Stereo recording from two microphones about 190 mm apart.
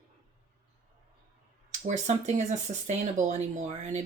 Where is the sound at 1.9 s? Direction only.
35° right (ahead or behind).